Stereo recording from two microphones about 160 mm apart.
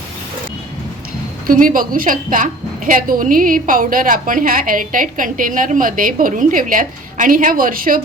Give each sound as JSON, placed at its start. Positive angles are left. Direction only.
{"t": 1.5, "sound": "a woman's voice", "side_deg": -60}